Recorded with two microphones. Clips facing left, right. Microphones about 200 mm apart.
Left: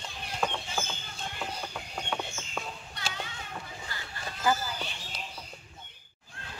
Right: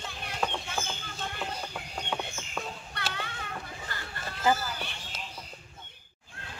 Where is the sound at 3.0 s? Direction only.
60° right (ahead or behind).